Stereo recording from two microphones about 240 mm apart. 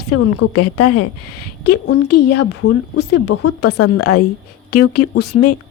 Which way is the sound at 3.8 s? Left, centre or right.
Left.